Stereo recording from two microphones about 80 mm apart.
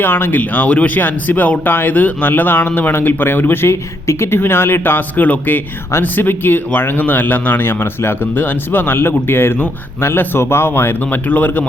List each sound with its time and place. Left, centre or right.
0.0 s speech: left